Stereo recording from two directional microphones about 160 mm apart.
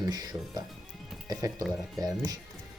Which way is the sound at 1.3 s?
20° right (ahead or behind).